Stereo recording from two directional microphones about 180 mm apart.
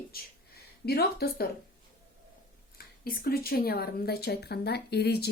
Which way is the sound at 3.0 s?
55° left (ahead or behind).